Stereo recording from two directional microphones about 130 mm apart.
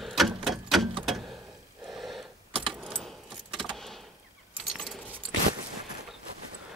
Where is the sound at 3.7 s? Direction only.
Centre (ahead or behind).